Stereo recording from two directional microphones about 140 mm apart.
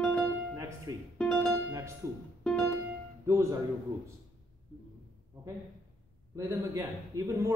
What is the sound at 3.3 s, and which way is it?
Speech, 20° right (ahead or behind).